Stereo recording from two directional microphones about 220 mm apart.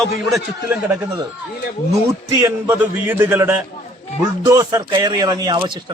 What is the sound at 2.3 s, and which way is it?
A man's voice, 10° right (ahead or behind).